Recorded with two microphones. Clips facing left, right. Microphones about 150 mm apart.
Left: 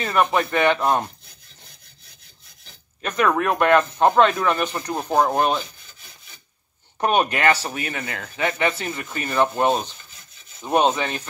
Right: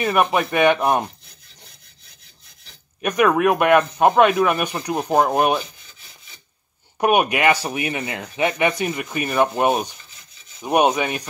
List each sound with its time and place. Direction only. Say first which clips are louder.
0.0 s speech: right 2 dB; 15° right (ahead or behind)
3.0 s speech: right 4 dB; 15° right (ahead or behind)
7.0 s speech: right 2 dB; 10° right (ahead or behind)